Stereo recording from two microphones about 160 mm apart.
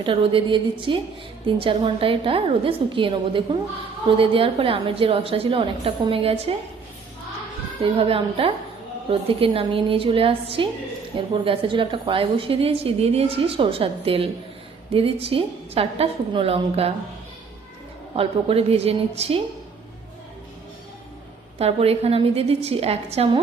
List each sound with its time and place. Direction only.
0.0 s a woman's voice: 35° right (ahead or behind)
7.8 s a woman's voice: 35° right (ahead or behind)
18.2 s a woman's voice: 35° right (ahead or behind)
21.6 s a woman's voice: 40° right (ahead or behind)